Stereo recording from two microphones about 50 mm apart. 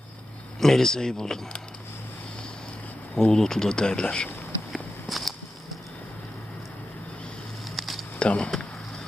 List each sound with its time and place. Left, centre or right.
0.6 s speech: centre
3.2 s speech: centre
4.7 s walk: centre
7.8 s a sound: centre
8.2 s speech: left